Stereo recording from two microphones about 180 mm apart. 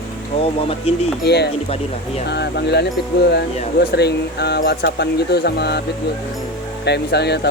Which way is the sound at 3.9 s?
65° left (ahead or behind).